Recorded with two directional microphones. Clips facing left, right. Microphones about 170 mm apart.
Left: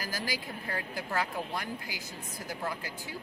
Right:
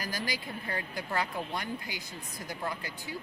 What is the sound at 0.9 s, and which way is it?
Speech, 5° left (ahead or behind).